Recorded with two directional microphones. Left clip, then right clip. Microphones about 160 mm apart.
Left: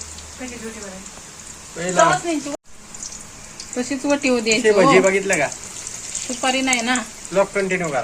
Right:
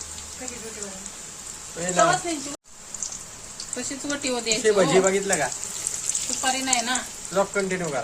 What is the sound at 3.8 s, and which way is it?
Speech, 15° left (ahead or behind).